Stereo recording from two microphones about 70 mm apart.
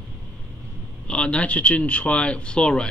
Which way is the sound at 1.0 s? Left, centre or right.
Centre.